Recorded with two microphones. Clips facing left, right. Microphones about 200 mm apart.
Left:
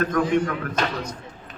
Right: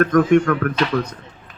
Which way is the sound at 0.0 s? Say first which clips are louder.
Right 7 dB; 50° right (ahead or behind).